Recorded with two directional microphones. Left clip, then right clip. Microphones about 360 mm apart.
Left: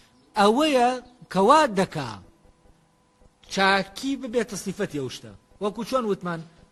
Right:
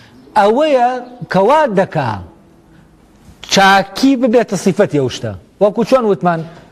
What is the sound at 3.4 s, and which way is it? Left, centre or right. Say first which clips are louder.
A man's voice: right 12 dB; right.